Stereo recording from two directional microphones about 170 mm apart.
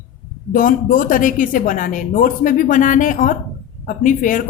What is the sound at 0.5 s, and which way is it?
A woman's voice, 55° left (ahead or behind).